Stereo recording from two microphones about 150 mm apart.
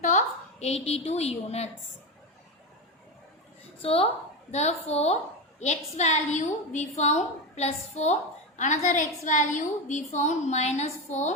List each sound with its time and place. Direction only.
0.0 s a woman's voice: 50° left (ahead or behind)
3.8 s a woman's voice: 40° left (ahead or behind)